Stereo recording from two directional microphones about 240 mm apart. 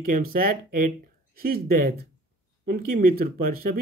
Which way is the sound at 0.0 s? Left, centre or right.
Right.